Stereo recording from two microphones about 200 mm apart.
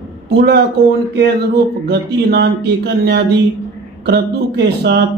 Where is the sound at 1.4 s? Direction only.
55° right (ahead or behind).